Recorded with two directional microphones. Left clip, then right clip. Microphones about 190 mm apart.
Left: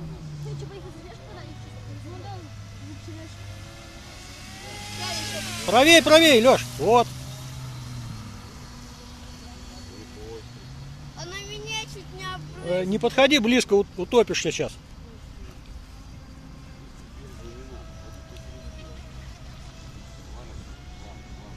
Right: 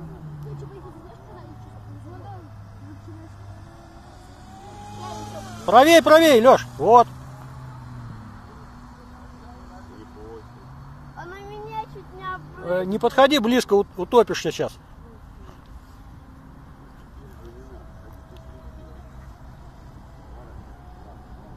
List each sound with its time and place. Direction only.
5.7 s speech: centre (ahead or behind)
11.3 s a sound: 90° left
12.6 s speech: 10° left (ahead or behind)